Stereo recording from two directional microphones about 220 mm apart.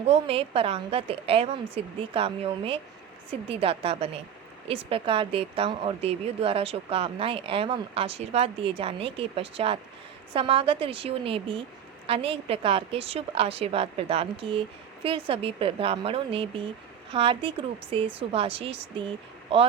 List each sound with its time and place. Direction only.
0.0 s a woman's voice: 25° right (ahead or behind)